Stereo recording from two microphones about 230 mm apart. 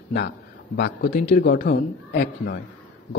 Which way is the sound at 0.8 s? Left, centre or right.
Left.